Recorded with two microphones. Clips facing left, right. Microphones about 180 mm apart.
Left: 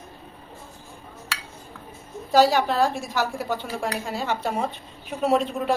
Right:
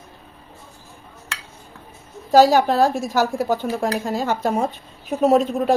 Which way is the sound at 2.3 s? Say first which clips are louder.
Right 5 dB; 45° right (ahead or behind).